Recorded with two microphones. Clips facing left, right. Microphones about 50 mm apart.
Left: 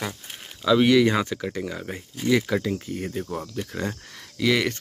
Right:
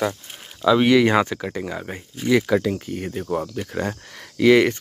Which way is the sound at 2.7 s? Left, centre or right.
Right.